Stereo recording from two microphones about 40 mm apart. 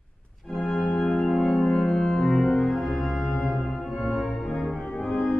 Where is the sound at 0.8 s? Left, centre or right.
Left.